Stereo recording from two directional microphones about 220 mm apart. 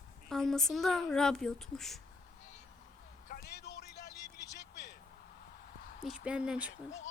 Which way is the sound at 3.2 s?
45° left (ahead or behind).